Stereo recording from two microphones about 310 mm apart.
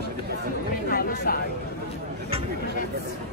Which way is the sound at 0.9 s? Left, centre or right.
Left.